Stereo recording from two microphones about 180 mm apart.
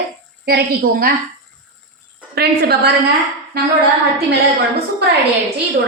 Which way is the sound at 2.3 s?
60° right (ahead or behind).